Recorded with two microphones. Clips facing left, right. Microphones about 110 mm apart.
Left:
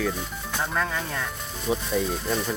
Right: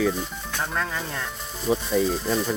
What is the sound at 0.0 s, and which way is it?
Speech, centre (ahead or behind).